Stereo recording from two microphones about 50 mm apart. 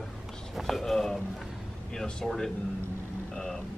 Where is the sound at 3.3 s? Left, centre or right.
Centre.